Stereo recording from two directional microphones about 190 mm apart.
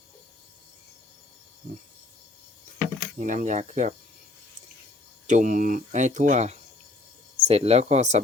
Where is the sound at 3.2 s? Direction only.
40° right (ahead or behind).